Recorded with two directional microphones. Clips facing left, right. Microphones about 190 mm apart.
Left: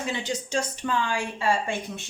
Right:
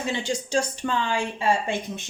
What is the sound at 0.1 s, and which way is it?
Speech, 30° right (ahead or behind).